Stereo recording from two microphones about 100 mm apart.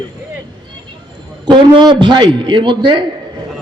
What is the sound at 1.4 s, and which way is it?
A man's voice, 45° right (ahead or behind).